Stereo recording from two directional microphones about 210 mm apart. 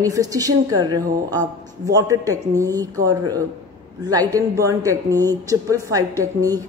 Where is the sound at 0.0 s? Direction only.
15° right (ahead or behind).